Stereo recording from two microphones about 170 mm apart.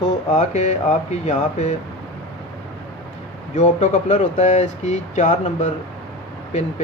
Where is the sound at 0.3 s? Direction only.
45° left (ahead or behind).